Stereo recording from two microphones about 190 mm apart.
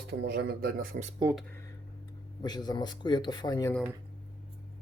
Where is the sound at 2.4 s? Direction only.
20° left (ahead or behind).